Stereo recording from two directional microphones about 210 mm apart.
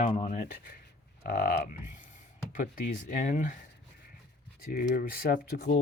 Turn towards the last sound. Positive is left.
turn(degrees=45)  # may be behind; listen again after turning